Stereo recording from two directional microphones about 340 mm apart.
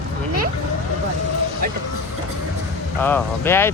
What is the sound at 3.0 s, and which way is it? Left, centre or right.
Speech, centre.